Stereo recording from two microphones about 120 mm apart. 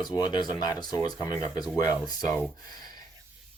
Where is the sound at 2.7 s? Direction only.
35° left (ahead or behind).